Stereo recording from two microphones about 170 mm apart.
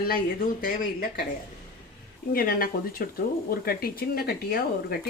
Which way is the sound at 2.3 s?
60° left (ahead or behind).